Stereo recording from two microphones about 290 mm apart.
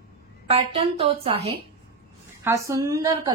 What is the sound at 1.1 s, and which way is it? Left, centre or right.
A woman's voice, centre.